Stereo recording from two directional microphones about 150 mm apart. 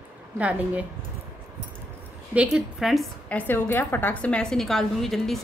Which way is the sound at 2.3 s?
5° right (ahead or behind).